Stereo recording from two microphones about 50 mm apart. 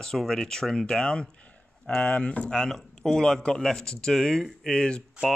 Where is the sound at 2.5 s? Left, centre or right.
Centre.